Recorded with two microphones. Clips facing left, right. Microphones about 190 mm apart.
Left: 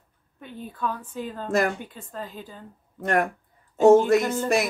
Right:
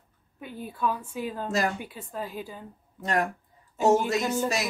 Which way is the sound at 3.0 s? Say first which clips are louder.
Left 4 dB; 55° left (ahead or behind).